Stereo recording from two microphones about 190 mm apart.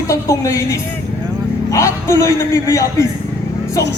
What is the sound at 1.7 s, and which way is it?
A man's voice, 15° left (ahead or behind).